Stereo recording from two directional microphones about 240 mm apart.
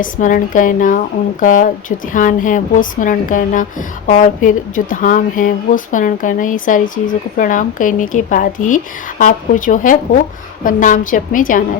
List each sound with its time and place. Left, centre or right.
0.0 s a woman's voice: left